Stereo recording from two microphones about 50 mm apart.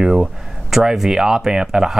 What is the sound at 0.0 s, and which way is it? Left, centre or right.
Speech, centre.